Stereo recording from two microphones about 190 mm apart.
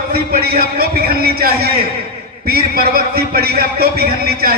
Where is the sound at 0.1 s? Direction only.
55° right (ahead or behind).